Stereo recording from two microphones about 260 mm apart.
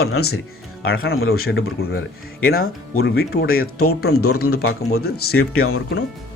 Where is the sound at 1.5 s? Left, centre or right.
Left.